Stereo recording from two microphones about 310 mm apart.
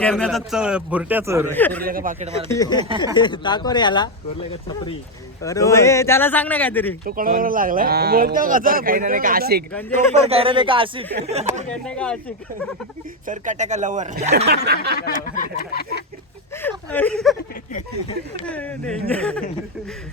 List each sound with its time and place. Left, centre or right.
0.0 s a man's voice: centre
1.5 s a man's voice: centre
1.8 s speech: right
2.5 s a man's voice: centre
5.4 s a man's voice: centre
7.0 s speech: right
9.9 s speech: centre
11.7 s a man's voice: centre
13.2 s speech: right
15.4 s a sound: left
16.6 s a man's voice: centre
19.1 s a man's voice: centre